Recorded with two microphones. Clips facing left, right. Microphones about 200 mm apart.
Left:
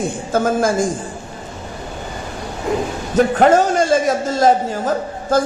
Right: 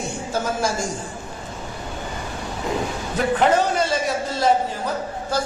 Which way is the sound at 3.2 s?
45° left (ahead or behind).